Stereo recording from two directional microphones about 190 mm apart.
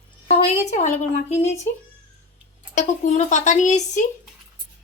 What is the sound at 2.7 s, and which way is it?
Speech, 35° left (ahead or behind).